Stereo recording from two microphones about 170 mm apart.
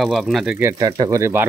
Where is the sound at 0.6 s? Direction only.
20° right (ahead or behind).